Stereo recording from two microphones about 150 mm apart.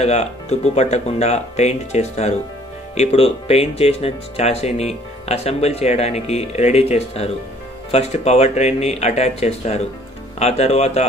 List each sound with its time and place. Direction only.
0.0 s speech: 45° left (ahead or behind)